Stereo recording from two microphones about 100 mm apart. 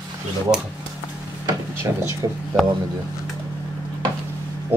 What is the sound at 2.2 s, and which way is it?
Speech, 45° right (ahead or behind).